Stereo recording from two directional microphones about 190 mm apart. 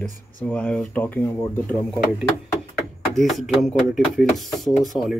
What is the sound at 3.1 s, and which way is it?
Speech, centre (ahead or behind).